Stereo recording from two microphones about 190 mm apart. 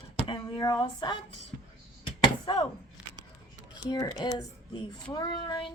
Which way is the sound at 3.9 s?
20° left (ahead or behind).